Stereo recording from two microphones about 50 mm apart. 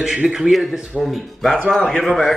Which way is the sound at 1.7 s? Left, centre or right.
Centre.